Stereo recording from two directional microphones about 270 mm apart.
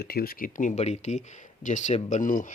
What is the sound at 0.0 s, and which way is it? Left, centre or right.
Speech, left.